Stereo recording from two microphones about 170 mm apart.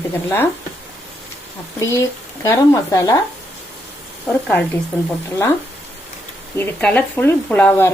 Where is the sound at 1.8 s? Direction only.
15° left (ahead or behind).